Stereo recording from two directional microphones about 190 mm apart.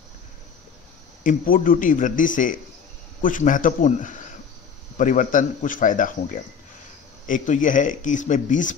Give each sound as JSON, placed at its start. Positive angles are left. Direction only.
{"t": 1.2, "sound": "a man's voice", "side_deg": 45}
{"t": 7.2, "sound": "speech", "side_deg": 40}